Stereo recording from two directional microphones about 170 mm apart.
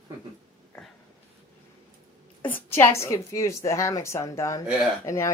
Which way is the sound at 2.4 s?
10° left (ahead or behind).